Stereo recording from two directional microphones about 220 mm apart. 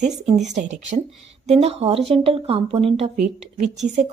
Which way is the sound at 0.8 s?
30° right (ahead or behind).